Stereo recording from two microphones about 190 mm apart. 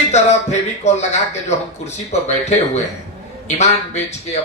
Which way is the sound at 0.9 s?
35° left (ahead or behind).